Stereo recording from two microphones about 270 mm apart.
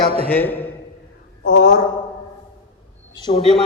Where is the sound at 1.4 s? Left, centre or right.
Left.